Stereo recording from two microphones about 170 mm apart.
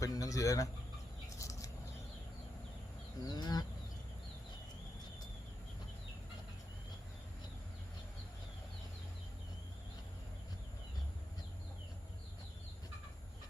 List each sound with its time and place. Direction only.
0.0 s speech: 20° left (ahead or behind)
1.4 s a sound: 20° left (ahead or behind)
3.2 s speech: 25° left (ahead or behind)